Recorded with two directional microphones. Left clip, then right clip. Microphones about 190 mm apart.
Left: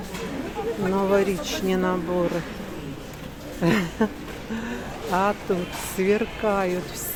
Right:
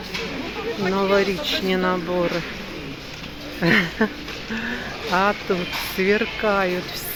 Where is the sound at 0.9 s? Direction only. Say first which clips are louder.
Right 2 dB; centre (ahead or behind).